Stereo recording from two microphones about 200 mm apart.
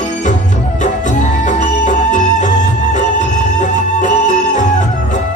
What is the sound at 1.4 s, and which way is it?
Music, 40° left (ahead or behind).